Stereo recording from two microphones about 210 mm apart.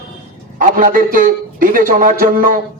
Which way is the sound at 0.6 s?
40° right (ahead or behind).